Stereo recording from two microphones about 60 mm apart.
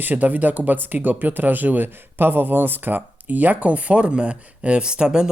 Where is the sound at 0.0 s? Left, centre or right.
Right.